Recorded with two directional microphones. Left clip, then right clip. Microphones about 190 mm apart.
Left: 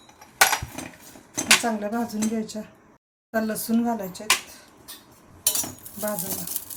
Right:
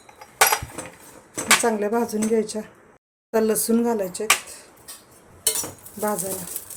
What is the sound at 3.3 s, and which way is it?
Speech, 40° right (ahead or behind).